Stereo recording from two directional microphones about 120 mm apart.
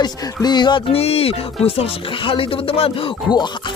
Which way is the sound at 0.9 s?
55° left (ahead or behind).